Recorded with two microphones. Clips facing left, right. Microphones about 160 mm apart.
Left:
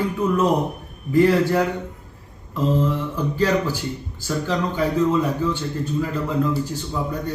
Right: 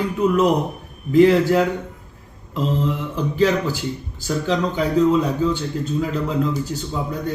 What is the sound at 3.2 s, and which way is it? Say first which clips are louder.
A man's voice: right 3 dB; 15° right (ahead or behind).